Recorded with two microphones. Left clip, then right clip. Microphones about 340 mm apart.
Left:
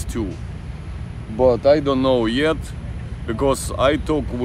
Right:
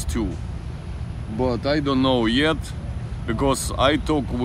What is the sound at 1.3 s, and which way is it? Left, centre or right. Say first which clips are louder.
Speech: left 8 dB; centre.